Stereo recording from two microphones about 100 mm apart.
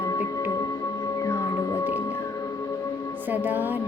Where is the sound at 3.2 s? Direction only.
15° right (ahead or behind).